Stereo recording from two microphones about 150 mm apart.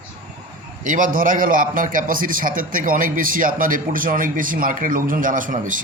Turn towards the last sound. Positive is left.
turn(degrees=-60)  # may be behind; listen again after turning